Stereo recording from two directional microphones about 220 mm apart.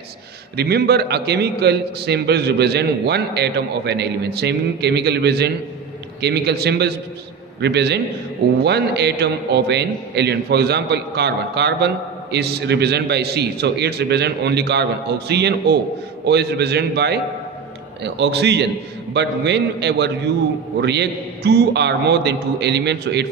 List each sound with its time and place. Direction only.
0.6 s a man's voice: 45° right (ahead or behind)